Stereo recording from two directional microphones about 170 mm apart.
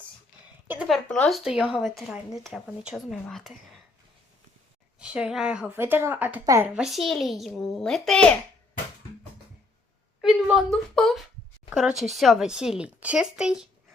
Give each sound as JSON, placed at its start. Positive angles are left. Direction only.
{"t": 0.7, "sound": "speech", "side_deg": 0}
{"t": 4.9, "sound": "speech", "side_deg": -5}
{"t": 6.4, "sound": "speech", "side_deg": -20}
{"t": 6.7, "sound": "speech", "side_deg": 0}
{"t": 10.2, "sound": "speech", "side_deg": -5}